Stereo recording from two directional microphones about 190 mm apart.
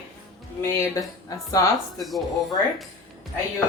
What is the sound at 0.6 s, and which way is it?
Speech, 15° left (ahead or behind).